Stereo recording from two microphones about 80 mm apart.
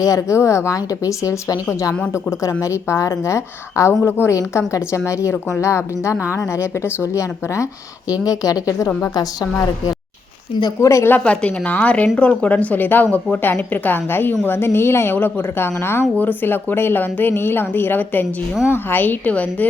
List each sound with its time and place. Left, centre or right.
0.0 s a woman's voice: left
10.8 s a woman's voice: left
11.1 s speech: centre